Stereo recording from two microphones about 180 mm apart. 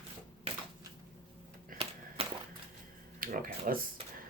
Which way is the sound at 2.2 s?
35° right (ahead or behind).